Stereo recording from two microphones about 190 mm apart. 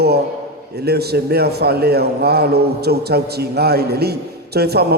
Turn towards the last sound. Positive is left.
turn(degrees=-55)  # may be behind; listen again after turning